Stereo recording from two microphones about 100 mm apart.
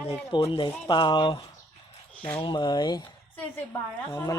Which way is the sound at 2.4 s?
45° left (ahead or behind).